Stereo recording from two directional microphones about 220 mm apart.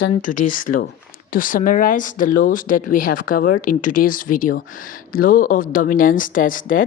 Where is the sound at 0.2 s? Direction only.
35° left (ahead or behind).